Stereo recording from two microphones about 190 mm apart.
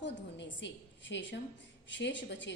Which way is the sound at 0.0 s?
70° left (ahead or behind).